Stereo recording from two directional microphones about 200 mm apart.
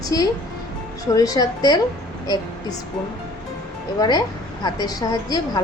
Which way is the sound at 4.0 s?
20° left (ahead or behind).